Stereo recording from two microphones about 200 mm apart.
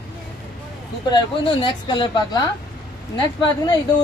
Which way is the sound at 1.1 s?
20° left (ahead or behind).